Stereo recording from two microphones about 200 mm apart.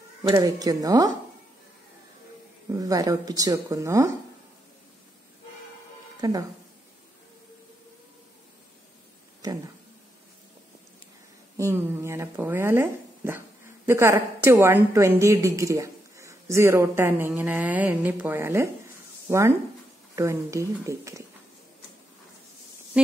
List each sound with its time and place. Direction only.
0.2 s speech: 20° right (ahead or behind)
2.7 s a woman's voice: 20° right (ahead or behind)
6.2 s speech: 20° right (ahead or behind)
9.4 s speech: 20° right (ahead or behind)
11.5 s a woman's voice: 15° right (ahead or behind)